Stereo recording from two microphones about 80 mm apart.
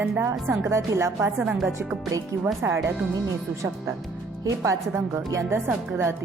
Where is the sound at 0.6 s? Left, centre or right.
Right.